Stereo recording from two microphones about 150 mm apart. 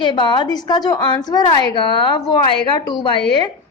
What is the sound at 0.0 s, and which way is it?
A woman's voice, 30° left (ahead or behind).